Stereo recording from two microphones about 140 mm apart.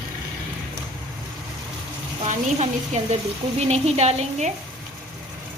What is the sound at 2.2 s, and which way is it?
A woman's voice, 55° right (ahead or behind).